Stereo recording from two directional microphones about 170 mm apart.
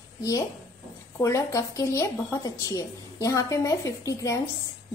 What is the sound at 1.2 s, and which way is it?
A woman's voice, 20° left (ahead or behind).